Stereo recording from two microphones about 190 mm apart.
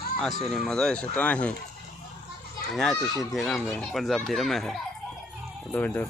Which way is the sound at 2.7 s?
Centre (ahead or behind).